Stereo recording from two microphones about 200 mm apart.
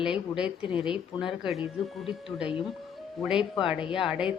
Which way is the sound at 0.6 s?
25° left (ahead or behind).